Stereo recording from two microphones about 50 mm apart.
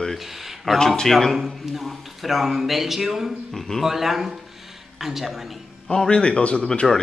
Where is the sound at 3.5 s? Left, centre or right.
Centre.